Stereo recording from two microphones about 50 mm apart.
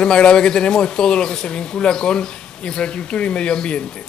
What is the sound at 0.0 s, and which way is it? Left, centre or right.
A man's voice, centre.